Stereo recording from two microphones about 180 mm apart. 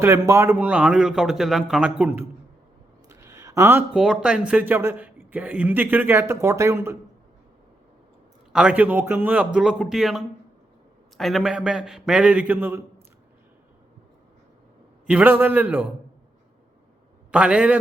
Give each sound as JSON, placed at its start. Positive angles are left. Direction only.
{"t": 0.0, "sound": "a man's voice", "side_deg": -15}
{"t": 8.5, "sound": "a man's voice", "side_deg": -5}
{"t": 15.0, "sound": "speech", "side_deg": -10}
{"t": 17.3, "sound": "a man's voice", "side_deg": -5}